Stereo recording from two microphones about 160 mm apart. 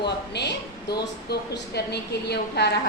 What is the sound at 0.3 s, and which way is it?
A woman's voice, 90° left.